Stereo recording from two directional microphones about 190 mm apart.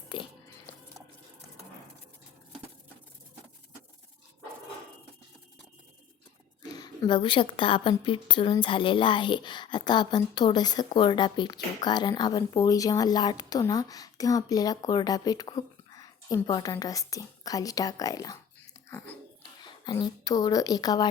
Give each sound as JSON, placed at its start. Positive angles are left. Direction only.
{"t": 0.1, "sound": "biting", "side_deg": 25}
{"t": 6.6, "sound": "speech", "side_deg": 20}
{"t": 18.9, "sound": "a sound", "side_deg": 15}
{"t": 19.6, "sound": "a woman's voice", "side_deg": 25}